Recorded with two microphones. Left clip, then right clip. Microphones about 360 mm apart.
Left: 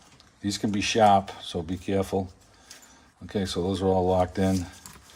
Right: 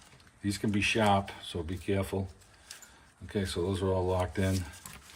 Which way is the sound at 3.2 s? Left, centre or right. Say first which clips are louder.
Left 4 dB; left.